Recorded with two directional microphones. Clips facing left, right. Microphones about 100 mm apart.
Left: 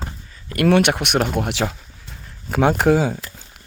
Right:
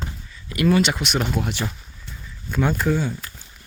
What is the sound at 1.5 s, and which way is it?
Speech, 90° left.